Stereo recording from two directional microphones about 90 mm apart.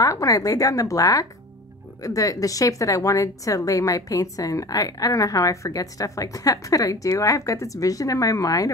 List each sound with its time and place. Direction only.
0.0 s a woman's voice: 40° left (ahead or behind)